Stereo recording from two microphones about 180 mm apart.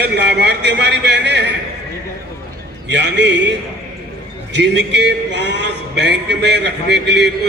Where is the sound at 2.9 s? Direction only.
75° right (ahead or behind).